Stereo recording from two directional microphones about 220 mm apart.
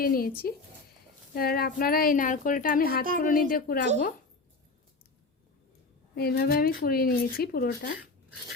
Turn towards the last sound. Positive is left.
turn(degrees=45)  # may be behind; listen again after turning